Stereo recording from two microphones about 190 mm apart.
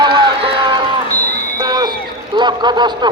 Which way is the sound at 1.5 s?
20° right (ahead or behind).